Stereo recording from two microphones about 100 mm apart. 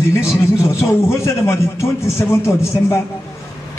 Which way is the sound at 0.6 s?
30° left (ahead or behind).